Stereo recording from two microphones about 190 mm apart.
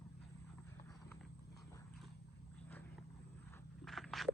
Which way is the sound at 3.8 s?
Centre (ahead or behind).